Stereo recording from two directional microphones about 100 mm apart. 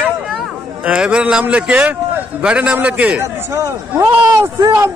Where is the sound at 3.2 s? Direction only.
30° right (ahead or behind).